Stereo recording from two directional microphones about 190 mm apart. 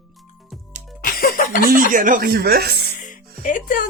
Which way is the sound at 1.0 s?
50° left (ahead or behind).